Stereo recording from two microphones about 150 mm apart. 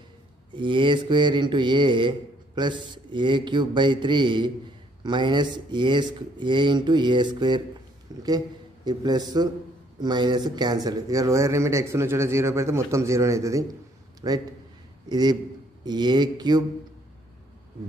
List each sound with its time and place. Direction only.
0.5 s a man's voice: 30° right (ahead or behind)